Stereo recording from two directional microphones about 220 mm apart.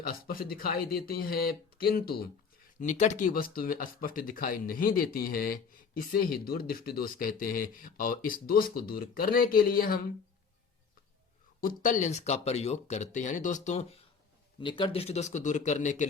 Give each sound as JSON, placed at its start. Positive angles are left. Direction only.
{"t": 0.1, "sound": "speech", "side_deg": 40}
{"t": 2.8, "sound": "speech", "side_deg": 35}
{"t": 11.6, "sound": "speech", "side_deg": 40}
{"t": 14.6, "sound": "speech", "side_deg": 20}